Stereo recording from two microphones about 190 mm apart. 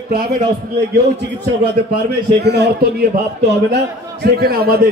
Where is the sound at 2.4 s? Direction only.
60° right (ahead or behind).